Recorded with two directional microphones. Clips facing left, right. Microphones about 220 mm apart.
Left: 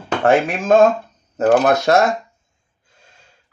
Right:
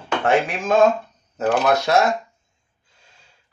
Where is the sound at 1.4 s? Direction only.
45° left (ahead or behind).